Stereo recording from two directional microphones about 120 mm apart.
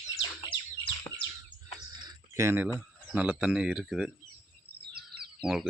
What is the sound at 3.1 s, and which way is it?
Speech, 10° right (ahead or behind).